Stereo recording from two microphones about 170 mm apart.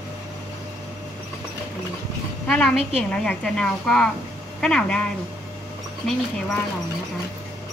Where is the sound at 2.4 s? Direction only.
5° left (ahead or behind).